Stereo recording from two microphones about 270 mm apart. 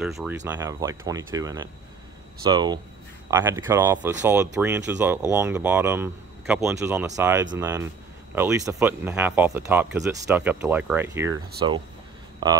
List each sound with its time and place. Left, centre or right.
0.0 s speech: centre